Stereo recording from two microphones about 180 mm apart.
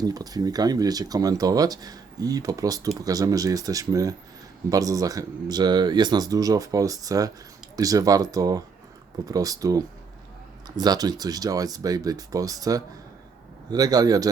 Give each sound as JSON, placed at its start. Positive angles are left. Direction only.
{"t": 0.0, "sound": "speech", "side_deg": -20}